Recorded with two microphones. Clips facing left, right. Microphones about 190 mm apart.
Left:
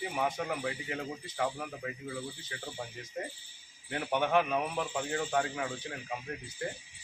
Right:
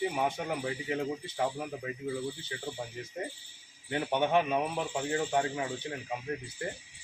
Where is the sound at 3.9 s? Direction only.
25° right (ahead or behind).